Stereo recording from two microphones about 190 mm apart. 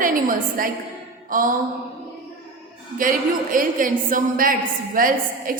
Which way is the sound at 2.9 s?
45° right (ahead or behind).